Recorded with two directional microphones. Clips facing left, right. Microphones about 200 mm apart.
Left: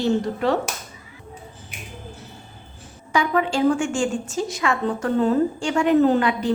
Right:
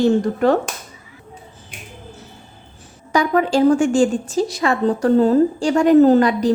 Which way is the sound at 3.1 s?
40° right (ahead or behind).